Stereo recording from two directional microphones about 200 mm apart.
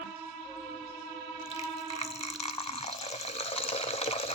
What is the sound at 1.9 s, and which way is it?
Water, 30° left (ahead or behind).